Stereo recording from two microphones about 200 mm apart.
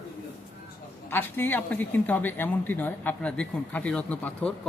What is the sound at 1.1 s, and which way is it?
A woman's voice, 10° left (ahead or behind).